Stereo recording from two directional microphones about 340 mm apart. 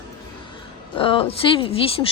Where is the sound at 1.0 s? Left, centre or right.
Centre.